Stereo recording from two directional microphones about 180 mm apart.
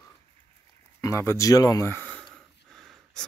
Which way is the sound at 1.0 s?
15° left (ahead or behind).